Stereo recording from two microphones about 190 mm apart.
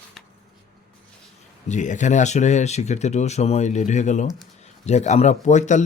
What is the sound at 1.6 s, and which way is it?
Speech, 40° left (ahead or behind).